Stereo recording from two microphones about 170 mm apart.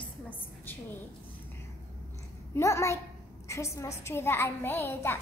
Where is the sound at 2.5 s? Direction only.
15° left (ahead or behind).